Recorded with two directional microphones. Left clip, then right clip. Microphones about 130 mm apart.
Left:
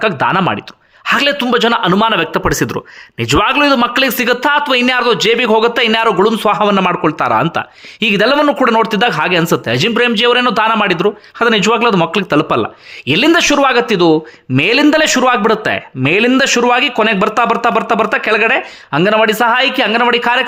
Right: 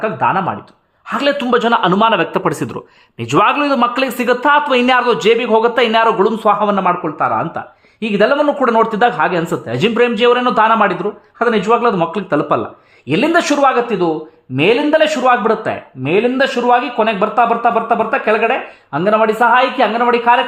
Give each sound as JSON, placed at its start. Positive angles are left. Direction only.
{"t": 0.0, "sound": "a man's voice", "side_deg": 30}
{"t": 5.4, "sound": "a man's voice", "side_deg": 25}
{"t": 6.8, "sound": "a man's voice", "side_deg": 35}
{"t": 7.5, "sound": "a man's voice", "side_deg": 25}
{"t": 11.9, "sound": "a man's voice", "side_deg": 20}
{"t": 13.1, "sound": "a man's voice", "side_deg": 35}
{"t": 14.5, "sound": "a man's voice", "side_deg": 45}
{"t": 15.4, "sound": "a man's voice", "side_deg": 30}